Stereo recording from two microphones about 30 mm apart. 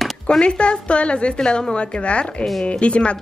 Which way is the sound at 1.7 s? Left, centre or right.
Left.